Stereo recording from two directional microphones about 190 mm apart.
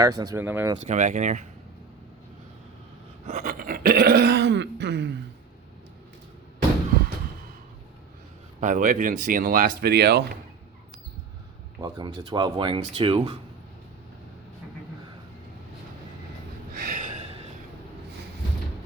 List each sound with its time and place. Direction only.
0.0 s speech: 20° right (ahead or behind)
0.9 s speech: 40° right (ahead or behind)
3.2 s throat clearing: 40° right (ahead or behind); by 5.1 s 60° right (ahead or behind)
8.6 s speech: 40° right (ahead or behind); by 10.3 s 60° right (ahead or behind)
11.8 s speech: 20° right (ahead or behind)
16.8 s gasp: 45° right (ahead or behind)